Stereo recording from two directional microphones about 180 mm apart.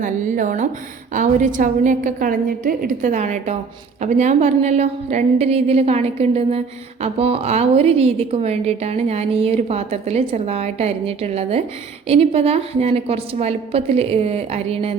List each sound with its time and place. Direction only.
0.0 s a woman's voice: 45° right (ahead or behind)